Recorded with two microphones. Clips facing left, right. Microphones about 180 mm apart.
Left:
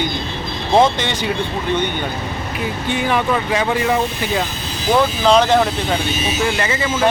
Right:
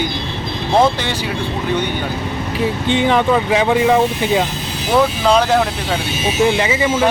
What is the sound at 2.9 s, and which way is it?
Speech, 20° right (ahead or behind).